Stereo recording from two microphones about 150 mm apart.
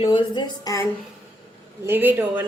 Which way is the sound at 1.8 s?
10° right (ahead or behind).